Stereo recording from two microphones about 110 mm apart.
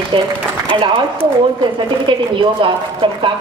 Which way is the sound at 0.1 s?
50° right (ahead or behind).